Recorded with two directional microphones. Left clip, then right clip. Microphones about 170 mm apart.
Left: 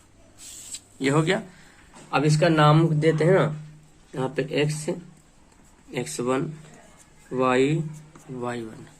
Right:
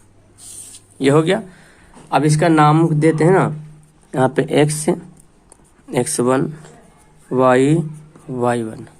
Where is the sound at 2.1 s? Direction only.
70° right (ahead or behind); by 4.9 s 85° right.